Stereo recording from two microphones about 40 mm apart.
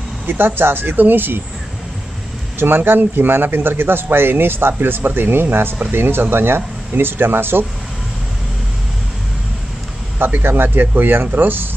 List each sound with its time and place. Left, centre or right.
0.3 s a man's voice: right
2.6 s a man's voice: right
10.4 s a man's voice: right